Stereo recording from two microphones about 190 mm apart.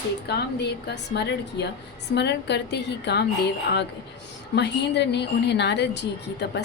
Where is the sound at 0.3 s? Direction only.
60° left (ahead or behind).